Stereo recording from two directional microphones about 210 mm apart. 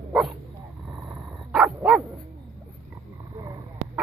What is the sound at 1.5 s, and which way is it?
Dog, centre (ahead or behind).